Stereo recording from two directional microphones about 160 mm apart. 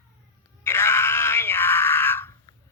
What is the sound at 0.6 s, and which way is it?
Wail, 15° left (ahead or behind).